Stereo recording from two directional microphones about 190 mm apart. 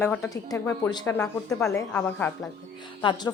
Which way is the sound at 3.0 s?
25° left (ahead or behind).